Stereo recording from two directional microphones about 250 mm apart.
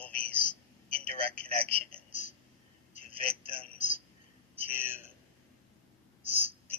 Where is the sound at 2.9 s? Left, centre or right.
Left.